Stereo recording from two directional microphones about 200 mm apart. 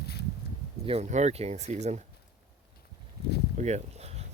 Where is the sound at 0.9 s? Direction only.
30° right (ahead or behind).